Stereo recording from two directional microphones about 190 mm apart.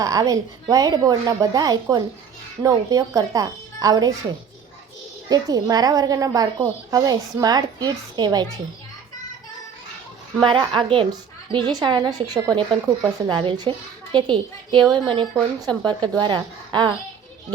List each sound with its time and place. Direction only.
0.0 s a woman's voice: 20° right (ahead or behind)
5.3 s a woman's voice: 20° right (ahead or behind)
10.4 s a woman's voice: 25° right (ahead or behind)